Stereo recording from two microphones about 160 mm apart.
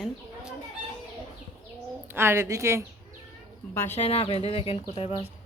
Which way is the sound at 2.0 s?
15° right (ahead or behind).